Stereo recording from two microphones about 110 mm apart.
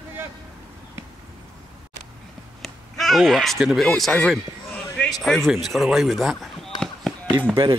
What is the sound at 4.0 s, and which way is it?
Speech, 5° left (ahead or behind).